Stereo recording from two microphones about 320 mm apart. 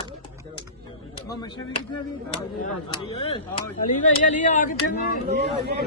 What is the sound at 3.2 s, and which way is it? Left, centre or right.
Speech, centre.